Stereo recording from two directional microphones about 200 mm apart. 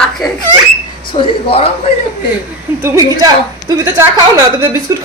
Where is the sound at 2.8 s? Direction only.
15° right (ahead or behind).